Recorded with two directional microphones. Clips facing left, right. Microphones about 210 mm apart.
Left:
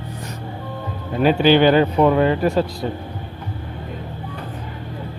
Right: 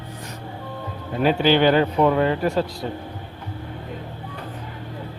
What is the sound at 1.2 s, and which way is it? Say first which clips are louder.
Speech: left 3 dB; 10° left (ahead or behind).